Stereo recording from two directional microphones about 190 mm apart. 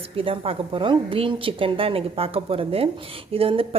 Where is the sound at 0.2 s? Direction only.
30° right (ahead or behind).